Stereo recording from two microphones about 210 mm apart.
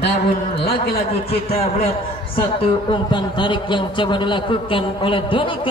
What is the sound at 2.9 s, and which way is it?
A man's voice, 20° left (ahead or behind).